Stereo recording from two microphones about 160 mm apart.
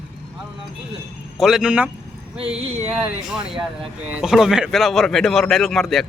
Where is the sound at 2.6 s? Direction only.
40° right (ahead or behind).